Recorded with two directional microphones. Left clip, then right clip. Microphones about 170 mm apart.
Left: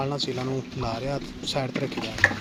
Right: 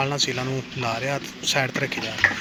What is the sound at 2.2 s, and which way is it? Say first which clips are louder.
Water: right 1 dB; 70° left (ahead or behind).